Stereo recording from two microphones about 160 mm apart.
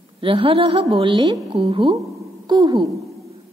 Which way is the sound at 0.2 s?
35° right (ahead or behind).